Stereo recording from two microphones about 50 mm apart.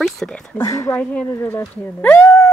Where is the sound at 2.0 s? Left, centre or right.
Left.